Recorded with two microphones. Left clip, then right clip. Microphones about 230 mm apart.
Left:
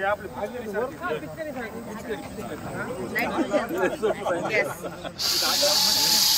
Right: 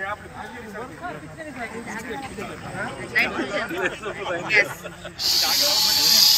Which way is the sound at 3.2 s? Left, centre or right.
Centre.